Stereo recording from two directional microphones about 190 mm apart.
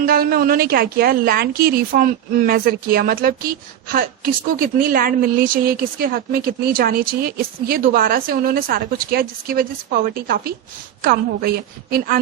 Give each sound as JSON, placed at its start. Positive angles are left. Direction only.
{"t": 0.0, "sound": "a woman's voice", "side_deg": -50}